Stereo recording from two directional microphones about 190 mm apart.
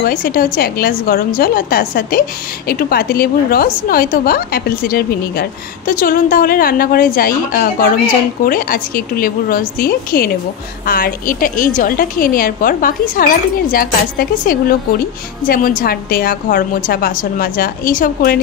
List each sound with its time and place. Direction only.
0.0 s a woman's voice: 50° left (ahead or behind)